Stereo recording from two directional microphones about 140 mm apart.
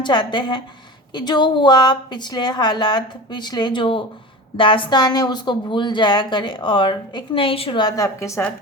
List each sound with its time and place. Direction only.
0.0 s a woman's voice: 35° left (ahead or behind)